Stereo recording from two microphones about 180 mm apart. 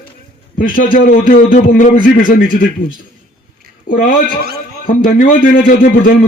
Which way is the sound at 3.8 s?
50° left (ahead or behind).